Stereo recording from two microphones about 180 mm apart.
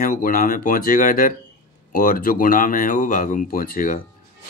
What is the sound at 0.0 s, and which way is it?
Speech, 50° left (ahead or behind).